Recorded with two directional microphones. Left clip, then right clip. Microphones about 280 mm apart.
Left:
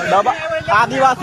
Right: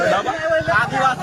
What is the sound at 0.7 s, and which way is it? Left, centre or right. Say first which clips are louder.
Speech: left 9 dB; left.